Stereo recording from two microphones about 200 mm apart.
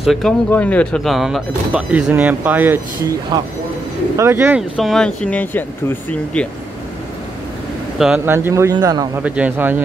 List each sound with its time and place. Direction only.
0.0 s speech: centre (ahead or behind)
4.2 s speech: 10° right (ahead or behind); by 6.4 s 10° left (ahead or behind)
8.0 s speech: 5° right (ahead or behind)
9.2 s speech: 5° right (ahead or behind)